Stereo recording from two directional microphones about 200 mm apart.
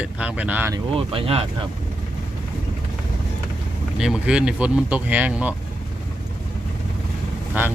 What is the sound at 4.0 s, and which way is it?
Speech, centre (ahead or behind).